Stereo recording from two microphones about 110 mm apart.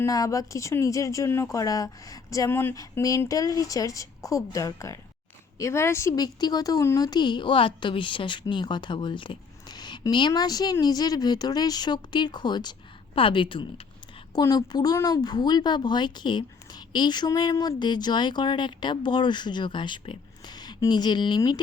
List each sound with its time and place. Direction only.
0.0 s speech: 30° left (ahead or behind)
2.5 s speech: 20° left (ahead or behind)
2.7 s a woman's voice: 30° left (ahead or behind); by 13.8 s 50° left (ahead or behind)
14.4 s a woman's voice: 35° left (ahead or behind)